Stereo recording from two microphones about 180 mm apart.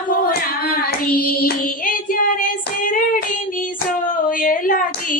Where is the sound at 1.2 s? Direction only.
55° left (ahead or behind).